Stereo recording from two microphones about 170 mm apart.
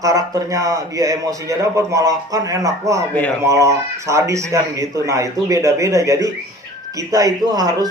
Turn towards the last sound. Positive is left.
turn(degrees=-20)  # may be behind; listen again after turning